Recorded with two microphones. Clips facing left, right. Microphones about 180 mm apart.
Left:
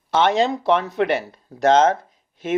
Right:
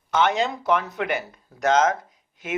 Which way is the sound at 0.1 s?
30° left (ahead or behind).